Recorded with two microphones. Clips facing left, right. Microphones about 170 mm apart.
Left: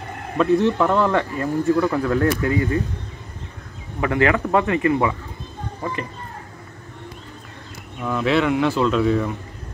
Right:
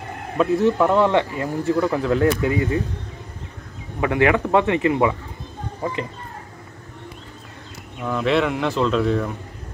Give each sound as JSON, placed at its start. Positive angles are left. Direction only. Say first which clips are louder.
{"t": 0.4, "sound": "speech", "louder": "even", "side_deg": 0}
{"t": 1.0, "sound": "speech", "louder": "right 1 dB", "side_deg": -15}
{"t": 4.0, "sound": "speech", "louder": "right 1 dB", "side_deg": -15}
{"t": 8.0, "sound": "speech", "louder": "even", "side_deg": 0}